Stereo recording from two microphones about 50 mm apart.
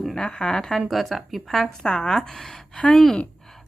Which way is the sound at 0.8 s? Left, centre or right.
Centre.